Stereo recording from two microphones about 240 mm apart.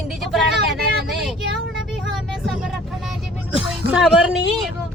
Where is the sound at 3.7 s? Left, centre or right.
Centre.